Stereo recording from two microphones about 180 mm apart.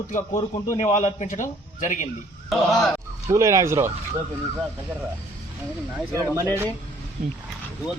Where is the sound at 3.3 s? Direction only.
15° right (ahead or behind).